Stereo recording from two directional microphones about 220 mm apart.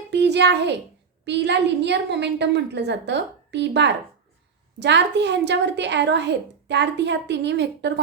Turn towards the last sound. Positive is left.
turn(degrees=-50)  # may be behind; listen again after turning